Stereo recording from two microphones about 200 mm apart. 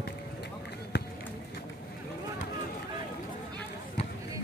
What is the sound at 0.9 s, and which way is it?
Run, 55° left (ahead or behind).